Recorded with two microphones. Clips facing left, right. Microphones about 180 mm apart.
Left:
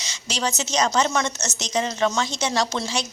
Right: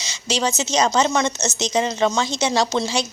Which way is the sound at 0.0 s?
25° right (ahead or behind).